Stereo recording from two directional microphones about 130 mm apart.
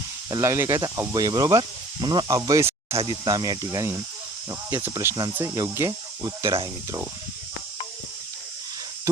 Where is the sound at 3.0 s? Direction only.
35° right (ahead or behind).